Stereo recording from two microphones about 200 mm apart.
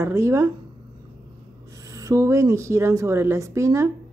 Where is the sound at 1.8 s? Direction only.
15° right (ahead or behind).